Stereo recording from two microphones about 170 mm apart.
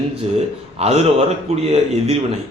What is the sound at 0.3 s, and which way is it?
Speech, 40° right (ahead or behind).